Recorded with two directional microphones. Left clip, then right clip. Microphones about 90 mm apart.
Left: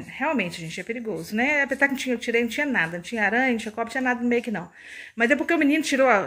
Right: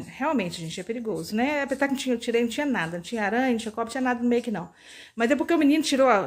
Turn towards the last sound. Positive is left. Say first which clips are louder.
# left 1 dB
turn(degrees=-15)  # may be behind; listen again after turning